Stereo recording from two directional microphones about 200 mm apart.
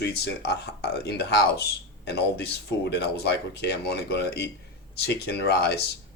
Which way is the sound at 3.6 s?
55° left (ahead or behind).